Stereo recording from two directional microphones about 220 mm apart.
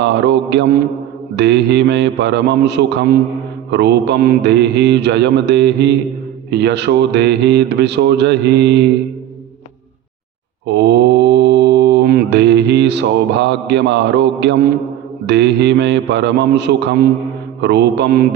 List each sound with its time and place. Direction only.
0.0 s speech: 50° right (ahead or behind)
10.8 s mantra: 50° right (ahead or behind)
15.3 s speech: 50° right (ahead or behind)